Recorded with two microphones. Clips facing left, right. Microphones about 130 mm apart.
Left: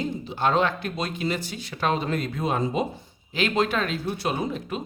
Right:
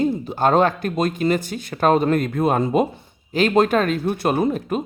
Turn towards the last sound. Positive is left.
turn(degrees=-50)  # may be behind; listen again after turning